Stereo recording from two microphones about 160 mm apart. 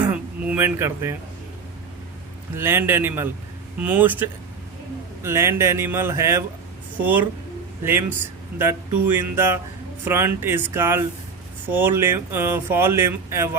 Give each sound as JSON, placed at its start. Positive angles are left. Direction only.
{"t": 0.0, "sound": "a sound", "side_deg": -10}
{"t": 2.6, "sound": "speech", "side_deg": -15}
{"t": 8.5, "sound": "speech", "side_deg": -15}